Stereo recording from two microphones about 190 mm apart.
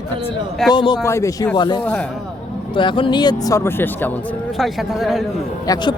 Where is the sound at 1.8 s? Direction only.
5° left (ahead or behind).